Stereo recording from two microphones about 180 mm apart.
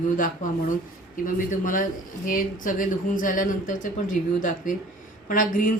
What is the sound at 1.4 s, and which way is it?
Speech, 50° left (ahead or behind).